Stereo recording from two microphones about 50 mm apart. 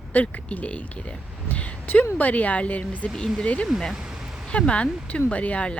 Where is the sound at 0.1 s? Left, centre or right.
Left.